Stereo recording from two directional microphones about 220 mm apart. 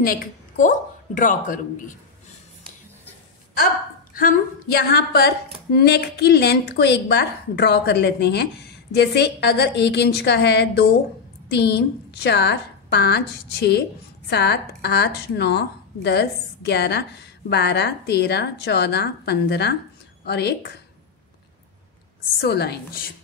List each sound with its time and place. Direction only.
0.0 s a woman's voice: 40° left (ahead or behind)
4.1 s a woman's voice: 40° left (ahead or behind)
22.4 s a woman's voice: 50° left (ahead or behind)